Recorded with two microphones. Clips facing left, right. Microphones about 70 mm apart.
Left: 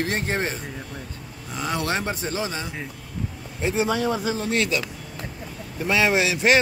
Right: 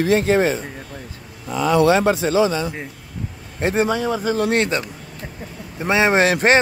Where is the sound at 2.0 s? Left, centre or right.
Right.